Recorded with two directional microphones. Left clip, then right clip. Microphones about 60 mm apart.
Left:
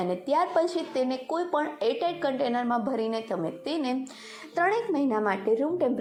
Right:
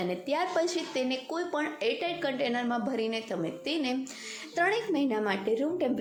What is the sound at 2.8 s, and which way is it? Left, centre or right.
A woman's voice, left.